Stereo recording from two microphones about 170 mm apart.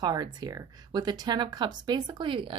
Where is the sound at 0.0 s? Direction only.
25° right (ahead or behind).